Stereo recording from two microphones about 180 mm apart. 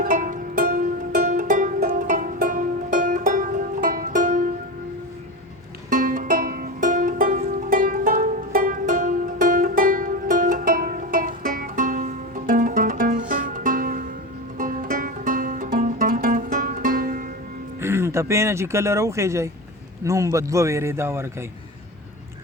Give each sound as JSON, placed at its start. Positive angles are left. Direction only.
{"t": 0.0, "sound": "music", "side_deg": -45}
{"t": 5.9, "sound": "music", "side_deg": -50}
{"t": 17.7, "sound": "a man's voice", "side_deg": -15}